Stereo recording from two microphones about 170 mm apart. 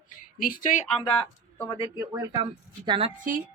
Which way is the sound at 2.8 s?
30° right (ahead or behind).